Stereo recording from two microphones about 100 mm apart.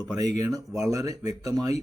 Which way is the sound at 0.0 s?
35° right (ahead or behind).